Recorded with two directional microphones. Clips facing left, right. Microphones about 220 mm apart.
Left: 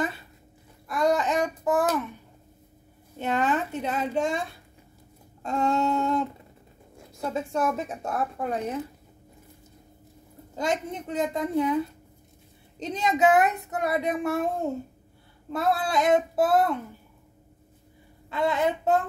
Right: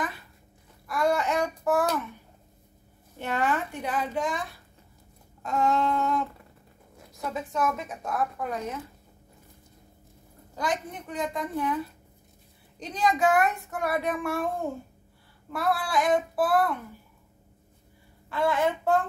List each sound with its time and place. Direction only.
0.8 s a sound: 20° left (ahead or behind)
3.2 s a sound: 20° left (ahead or behind)
7.2 s speech: 30° left (ahead or behind)
10.5 s speech: 25° left (ahead or behind)
15.5 s speech: 20° left (ahead or behind)
18.3 s speech: 20° left (ahead or behind)